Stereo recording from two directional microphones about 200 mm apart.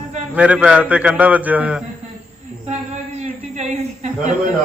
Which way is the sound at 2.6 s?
35° right (ahead or behind).